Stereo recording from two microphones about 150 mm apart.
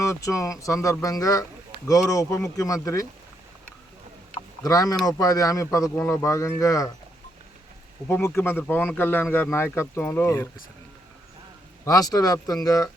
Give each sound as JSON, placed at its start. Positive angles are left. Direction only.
{"t": 0.0, "sound": "speech", "side_deg": 20}
{"t": 4.6, "sound": "speech", "side_deg": 25}
{"t": 8.0, "sound": "speech", "side_deg": 15}
{"t": 11.9, "sound": "speech", "side_deg": 25}